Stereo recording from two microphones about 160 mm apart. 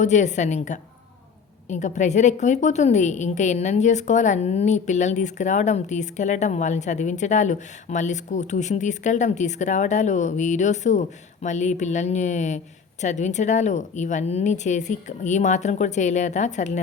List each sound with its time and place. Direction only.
0.0 s a woman's voice: 50° left (ahead or behind)